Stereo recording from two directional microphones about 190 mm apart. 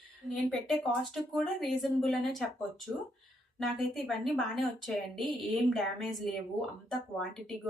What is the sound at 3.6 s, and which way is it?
Speech, centre (ahead or behind).